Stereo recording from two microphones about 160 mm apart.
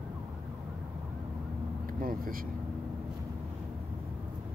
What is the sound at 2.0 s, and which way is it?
Speech, 60° right (ahead or behind).